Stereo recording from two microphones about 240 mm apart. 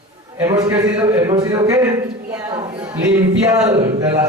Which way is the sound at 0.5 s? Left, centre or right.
Centre.